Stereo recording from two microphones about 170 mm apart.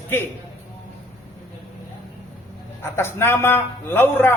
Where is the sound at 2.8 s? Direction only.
15° left (ahead or behind).